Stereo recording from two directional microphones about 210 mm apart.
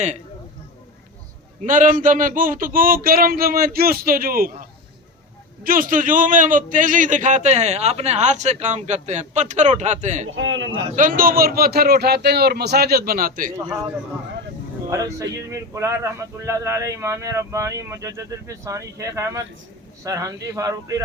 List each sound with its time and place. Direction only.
1.6 s speech: 40° right (ahead or behind)
5.6 s a man's voice: 40° right (ahead or behind)
10.3 s a man's voice: 65° right (ahead or behind)
10.7 s speech: 35° right (ahead or behind)
14.8 s speech: 15° right (ahead or behind)